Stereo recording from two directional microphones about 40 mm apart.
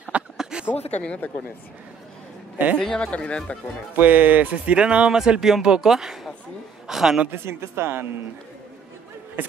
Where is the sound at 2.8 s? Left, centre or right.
Left.